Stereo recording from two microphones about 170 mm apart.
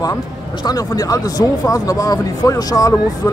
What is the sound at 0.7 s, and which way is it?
Speech, 20° left (ahead or behind).